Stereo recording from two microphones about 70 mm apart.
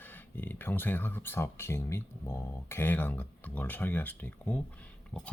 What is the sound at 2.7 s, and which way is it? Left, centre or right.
Speech, left.